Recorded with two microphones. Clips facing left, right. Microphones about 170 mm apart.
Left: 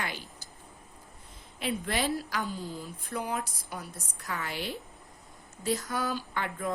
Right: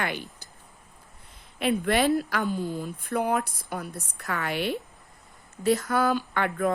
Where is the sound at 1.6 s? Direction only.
60° right (ahead or behind).